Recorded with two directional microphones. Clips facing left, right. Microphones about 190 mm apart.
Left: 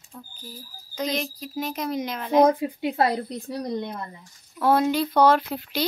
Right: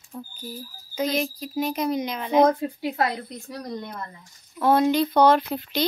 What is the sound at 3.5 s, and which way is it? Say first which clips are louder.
Speech: left 4 dB; 20° left (ahead or behind).